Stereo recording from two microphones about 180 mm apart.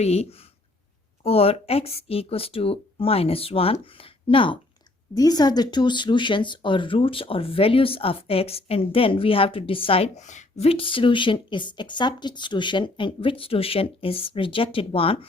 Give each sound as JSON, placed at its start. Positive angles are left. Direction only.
{"t": 0.0, "sound": "speech", "side_deg": 35}